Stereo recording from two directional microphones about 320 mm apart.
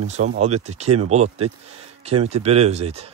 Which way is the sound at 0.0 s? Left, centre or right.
Right.